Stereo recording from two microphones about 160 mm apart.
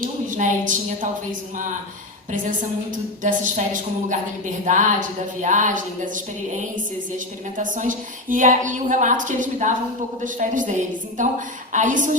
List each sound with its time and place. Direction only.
0.0 s a woman's voice: 55° right (ahead or behind)
7.6 s a woman's voice: 55° right (ahead or behind)